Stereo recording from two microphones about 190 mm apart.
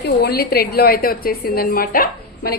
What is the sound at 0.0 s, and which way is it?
A woman's voice, 55° left (ahead or behind).